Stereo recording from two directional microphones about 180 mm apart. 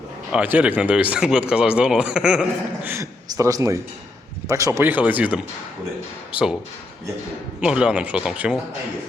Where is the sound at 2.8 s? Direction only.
15° right (ahead or behind).